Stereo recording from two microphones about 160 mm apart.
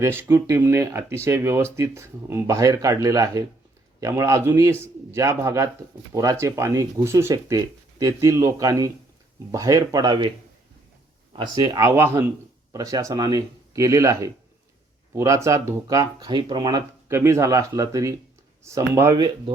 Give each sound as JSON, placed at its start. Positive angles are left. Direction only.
{"t": 0.0, "sound": "speech", "side_deg": -15}
{"t": 11.6, "sound": "speech", "side_deg": -20}